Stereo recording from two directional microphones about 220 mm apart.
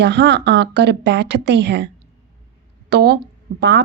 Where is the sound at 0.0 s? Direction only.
50° right (ahead or behind).